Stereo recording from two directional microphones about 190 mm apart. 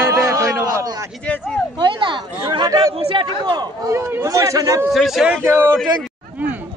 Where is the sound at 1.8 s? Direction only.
25° right (ahead or behind).